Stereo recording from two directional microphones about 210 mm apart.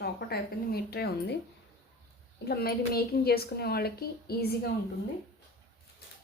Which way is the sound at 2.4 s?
50° left (ahead or behind).